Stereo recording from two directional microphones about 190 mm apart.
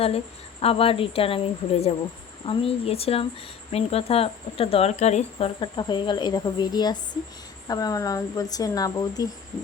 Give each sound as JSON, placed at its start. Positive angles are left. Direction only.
{"t": 0.6, "sound": "speech", "side_deg": 30}